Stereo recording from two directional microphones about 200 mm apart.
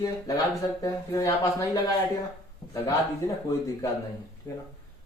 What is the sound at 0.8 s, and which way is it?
Speech, 15° left (ahead or behind).